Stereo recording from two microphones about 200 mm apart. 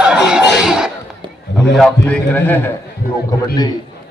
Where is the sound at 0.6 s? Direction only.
5° right (ahead or behind).